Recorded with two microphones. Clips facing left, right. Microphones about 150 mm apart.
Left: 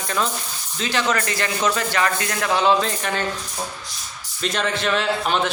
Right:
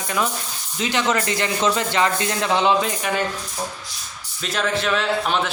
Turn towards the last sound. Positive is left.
turn(degrees=0)  # may be behind; listen again after turning